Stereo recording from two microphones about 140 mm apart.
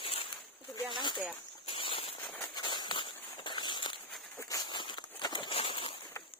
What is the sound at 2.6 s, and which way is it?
Walk, 35° left (ahead or behind).